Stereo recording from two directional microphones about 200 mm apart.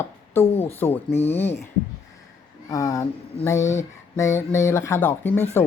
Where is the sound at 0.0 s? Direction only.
10° left (ahead or behind).